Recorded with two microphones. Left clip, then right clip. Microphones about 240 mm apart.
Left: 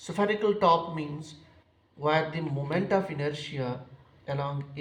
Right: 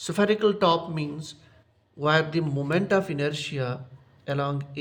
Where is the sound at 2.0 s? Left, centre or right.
Right.